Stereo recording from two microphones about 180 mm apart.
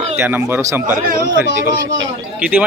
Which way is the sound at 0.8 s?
50° right (ahead or behind).